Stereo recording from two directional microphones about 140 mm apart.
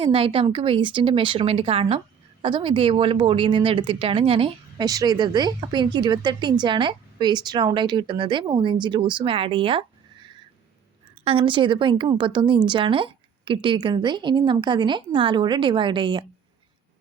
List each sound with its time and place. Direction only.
0.0 s a woman's voice: 40° right (ahead or behind)
4.9 s a woman's voice: 30° right (ahead or behind)